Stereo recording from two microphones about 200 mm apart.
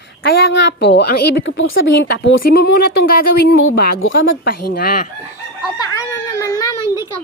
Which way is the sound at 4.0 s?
70° left (ahead or behind).